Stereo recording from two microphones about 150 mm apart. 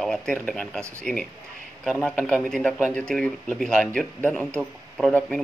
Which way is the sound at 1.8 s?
5° left (ahead or behind).